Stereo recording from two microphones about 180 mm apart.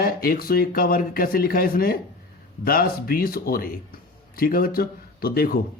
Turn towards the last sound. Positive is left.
turn(degrees=55)  # may be behind; listen again after turning